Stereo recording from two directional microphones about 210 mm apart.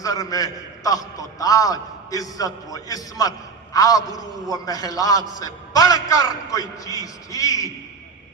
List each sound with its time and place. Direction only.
0.0 s a man's voice: 15° left (ahead or behind)